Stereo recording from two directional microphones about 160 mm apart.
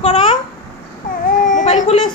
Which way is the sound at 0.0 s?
30° left (ahead or behind).